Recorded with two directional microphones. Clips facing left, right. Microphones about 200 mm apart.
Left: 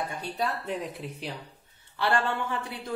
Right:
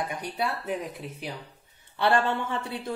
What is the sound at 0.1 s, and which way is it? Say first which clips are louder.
Speech: right 1 dB; 15° right (ahead or behind).